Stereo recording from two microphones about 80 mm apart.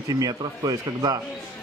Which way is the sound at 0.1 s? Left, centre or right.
Right.